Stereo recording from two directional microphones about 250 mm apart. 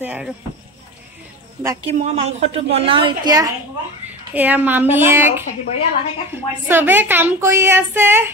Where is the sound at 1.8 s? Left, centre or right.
Right; by 8.3 s centre.